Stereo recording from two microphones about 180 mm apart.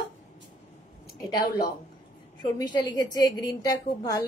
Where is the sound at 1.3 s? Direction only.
55° left (ahead or behind).